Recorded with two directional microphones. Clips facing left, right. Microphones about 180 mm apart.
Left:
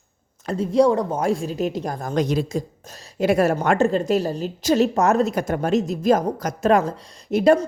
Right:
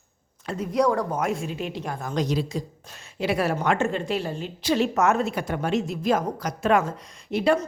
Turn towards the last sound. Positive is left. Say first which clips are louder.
# left 6 dB
turn(degrees=45)  # may be behind; listen again after turning